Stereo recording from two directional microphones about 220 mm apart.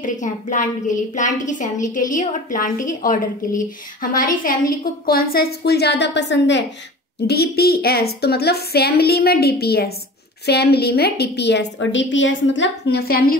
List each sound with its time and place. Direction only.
0.0 s a woman's voice: 35° left (ahead or behind)